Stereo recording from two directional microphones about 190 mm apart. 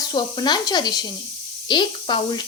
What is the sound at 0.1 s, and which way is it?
Speech, 20° left (ahead or behind).